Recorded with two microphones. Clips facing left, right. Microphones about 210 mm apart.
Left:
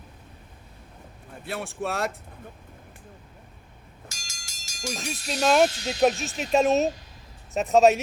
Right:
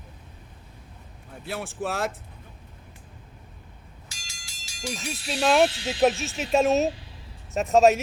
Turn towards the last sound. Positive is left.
turn(degrees=0)  # may be behind; listen again after turning